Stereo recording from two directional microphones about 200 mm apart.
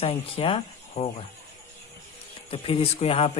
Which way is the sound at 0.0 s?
30° left (ahead or behind).